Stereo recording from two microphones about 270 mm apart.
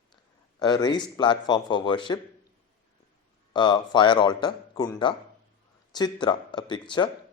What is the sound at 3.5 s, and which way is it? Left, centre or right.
Speech, centre.